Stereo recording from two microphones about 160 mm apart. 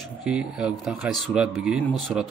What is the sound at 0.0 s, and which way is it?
Speech, 5° right (ahead or behind).